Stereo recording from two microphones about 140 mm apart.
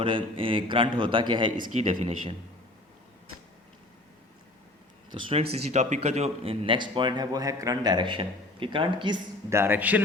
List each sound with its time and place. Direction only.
0.0 s speech: 35° right (ahead or behind)
1.5 s speech: 75° right (ahead or behind)
1.9 s speech: 40° right (ahead or behind)
5.1 s speech: 45° right (ahead or behind)
9.5 s a man's voice: 15° right (ahead or behind)